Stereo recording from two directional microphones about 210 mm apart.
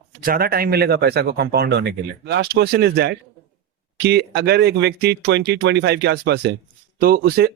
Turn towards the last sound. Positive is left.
turn(degrees=-45)  # may be behind; listen again after turning